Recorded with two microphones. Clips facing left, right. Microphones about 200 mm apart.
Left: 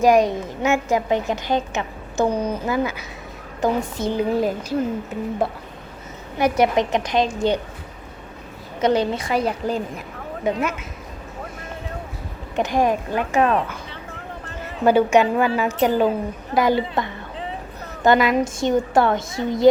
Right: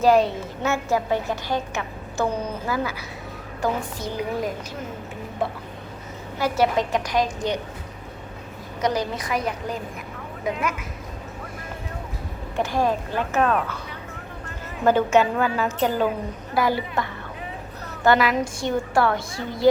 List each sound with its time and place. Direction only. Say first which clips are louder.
0.0 s a woman's voice: left 2 dB; 15° left (ahead or behind)
6.4 s a woman's voice: left 3 dB; 20° left (ahead or behind)
8.8 s a woman's voice: left 5 dB; 25° left (ahead or behind)
12.5 s a woman's voice: left 3 dB; 20° left (ahead or behind)
14.8 s a woman's voice: left 3 dB; 10° left (ahead or behind)